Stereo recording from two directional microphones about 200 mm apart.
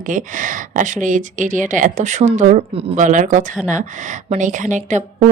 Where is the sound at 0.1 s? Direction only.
40° right (ahead or behind).